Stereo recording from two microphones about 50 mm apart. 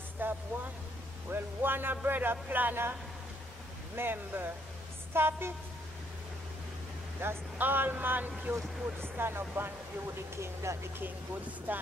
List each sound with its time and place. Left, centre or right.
0.2 s vehicle: right
1.3 s speech: right
3.9 s speech: right
7.2 s a man's voice: right
9.2 s speech: right
10.3 s speech: right
11.7 s a man's voice: right